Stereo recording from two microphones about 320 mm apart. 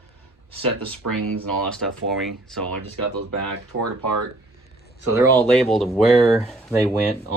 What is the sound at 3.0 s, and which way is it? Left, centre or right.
Speech, right.